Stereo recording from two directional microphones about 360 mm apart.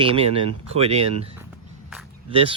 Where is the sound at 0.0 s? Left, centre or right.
Centre.